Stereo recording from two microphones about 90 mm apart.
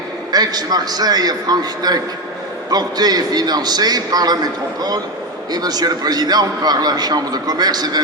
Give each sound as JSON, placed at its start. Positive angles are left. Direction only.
{"t": 0.3, "sound": "a man's voice", "side_deg": -50}
{"t": 5.5, "sound": "a man's voice", "side_deg": -50}